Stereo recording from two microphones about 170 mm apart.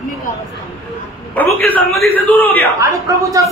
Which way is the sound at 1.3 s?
10° left (ahead or behind).